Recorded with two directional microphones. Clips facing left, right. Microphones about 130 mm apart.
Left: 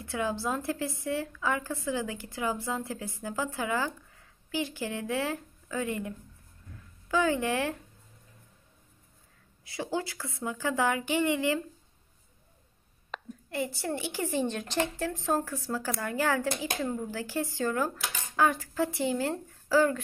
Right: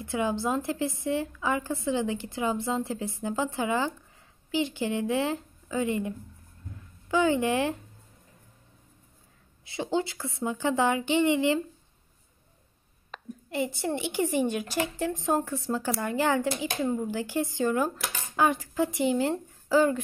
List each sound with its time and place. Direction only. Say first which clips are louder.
0.0 s a woman's voice: right 3 dB; 20° right (ahead or behind)
9.7 s a woman's voice: right 4 dB; 25° right (ahead or behind)
13.5 s a woman's voice: right 3 dB; 20° right (ahead or behind)